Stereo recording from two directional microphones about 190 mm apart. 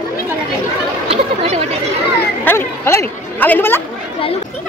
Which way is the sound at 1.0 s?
35° right (ahead or behind).